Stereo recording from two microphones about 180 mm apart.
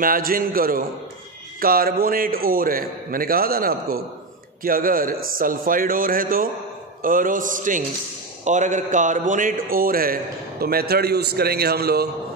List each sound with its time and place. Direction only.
0.0 s a man's voice: 50° right (ahead or behind)